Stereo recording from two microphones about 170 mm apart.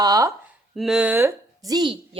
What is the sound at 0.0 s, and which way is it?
Speech, 20° right (ahead or behind).